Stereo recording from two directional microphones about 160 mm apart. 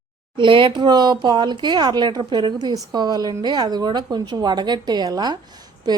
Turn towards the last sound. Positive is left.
turn(degrees=-25)  # may be behind; listen again after turning